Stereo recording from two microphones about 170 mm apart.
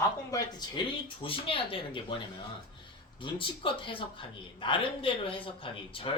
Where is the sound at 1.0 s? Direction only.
30° left (ahead or behind).